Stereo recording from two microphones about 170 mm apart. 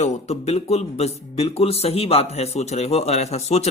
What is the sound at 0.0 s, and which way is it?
A man's voice, 40° left (ahead or behind).